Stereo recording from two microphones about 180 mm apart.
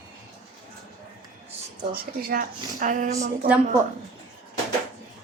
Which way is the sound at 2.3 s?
50° right (ahead or behind).